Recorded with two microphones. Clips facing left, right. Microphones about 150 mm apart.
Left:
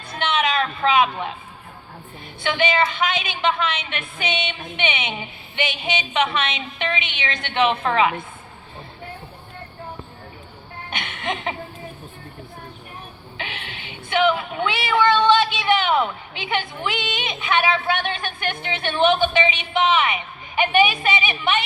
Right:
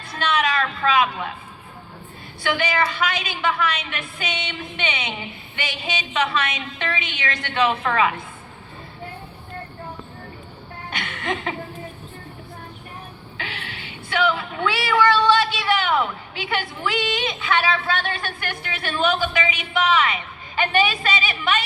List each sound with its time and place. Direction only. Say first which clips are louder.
0.1 s a sound: even; 20° left (ahead or behind)
2.4 s a woman's voice: left 2 dB; 20° left (ahead or behind)
10.9 s music: right 1 dB; 20° left (ahead or behind)
13.3 s speech: left 1 dB; 20° left (ahead or behind)